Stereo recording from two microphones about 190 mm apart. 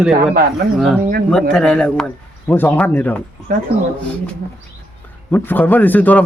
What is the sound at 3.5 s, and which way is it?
Speech, 45° right (ahead or behind).